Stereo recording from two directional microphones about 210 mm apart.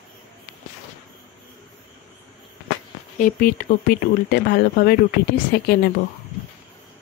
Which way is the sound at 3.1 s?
40° left (ahead or behind).